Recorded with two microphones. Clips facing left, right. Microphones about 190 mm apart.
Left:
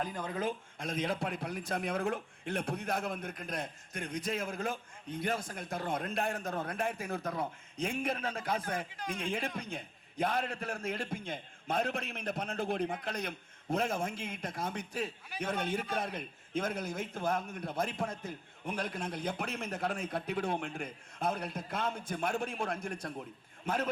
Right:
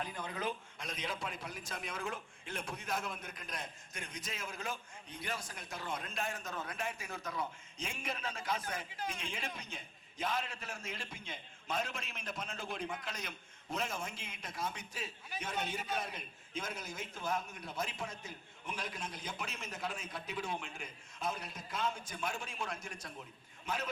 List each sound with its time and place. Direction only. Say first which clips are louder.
0.0 s a man's voice: left 5 dB; 40° left (ahead or behind)